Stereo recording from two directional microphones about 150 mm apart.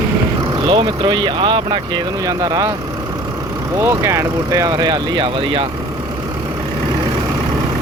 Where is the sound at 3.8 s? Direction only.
15° right (ahead or behind); by 5.7 s 35° right (ahead or behind).